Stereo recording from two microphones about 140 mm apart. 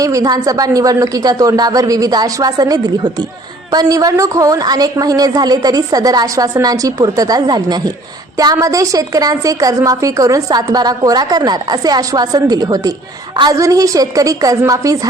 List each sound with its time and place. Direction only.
0.0 s a woman's voice: 25° right (ahead or behind)